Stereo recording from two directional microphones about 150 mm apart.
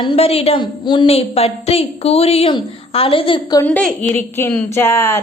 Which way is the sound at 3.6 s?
10° left (ahead or behind).